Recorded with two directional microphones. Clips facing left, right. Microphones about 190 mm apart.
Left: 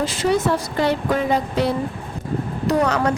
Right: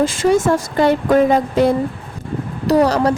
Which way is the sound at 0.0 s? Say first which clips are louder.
Right 5 dB; 50° right (ahead or behind).